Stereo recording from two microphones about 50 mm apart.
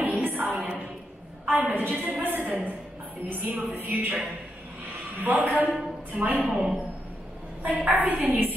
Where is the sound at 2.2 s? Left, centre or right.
Right.